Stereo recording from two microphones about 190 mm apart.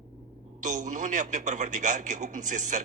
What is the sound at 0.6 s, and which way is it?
A man's voice, 40° right (ahead or behind).